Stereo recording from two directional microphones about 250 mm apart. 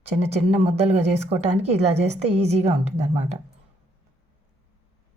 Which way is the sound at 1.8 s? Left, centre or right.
Right.